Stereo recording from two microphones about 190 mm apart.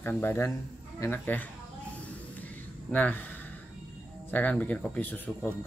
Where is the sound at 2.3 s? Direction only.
10° left (ahead or behind).